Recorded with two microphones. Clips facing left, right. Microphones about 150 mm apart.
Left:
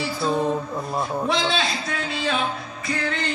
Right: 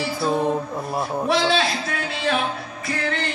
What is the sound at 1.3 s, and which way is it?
A man's voice, 55° right (ahead or behind).